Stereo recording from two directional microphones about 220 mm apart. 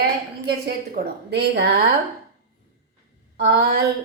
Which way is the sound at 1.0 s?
45° right (ahead or behind).